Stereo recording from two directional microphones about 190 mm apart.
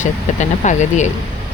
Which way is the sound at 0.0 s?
40° left (ahead or behind).